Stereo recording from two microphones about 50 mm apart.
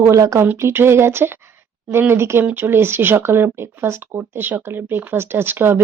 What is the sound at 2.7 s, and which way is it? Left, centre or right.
Speech, right.